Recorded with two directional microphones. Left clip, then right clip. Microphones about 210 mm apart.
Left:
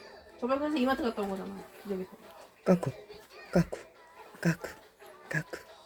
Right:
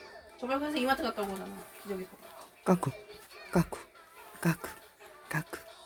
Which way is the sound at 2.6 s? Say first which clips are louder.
Left 2 dB; 15° right (ahead or behind).